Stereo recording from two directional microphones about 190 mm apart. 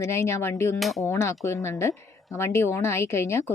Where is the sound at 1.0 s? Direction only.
15° left (ahead or behind).